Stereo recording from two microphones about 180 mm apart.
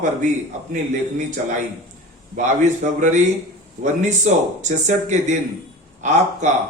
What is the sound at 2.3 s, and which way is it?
Speech, 40° right (ahead or behind).